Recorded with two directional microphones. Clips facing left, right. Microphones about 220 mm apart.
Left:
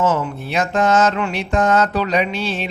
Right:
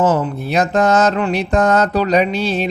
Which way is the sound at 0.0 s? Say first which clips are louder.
Right 3 dB; 35° right (ahead or behind).